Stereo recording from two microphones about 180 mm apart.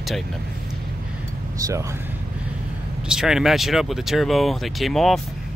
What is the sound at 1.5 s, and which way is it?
Speech, 15° right (ahead or behind).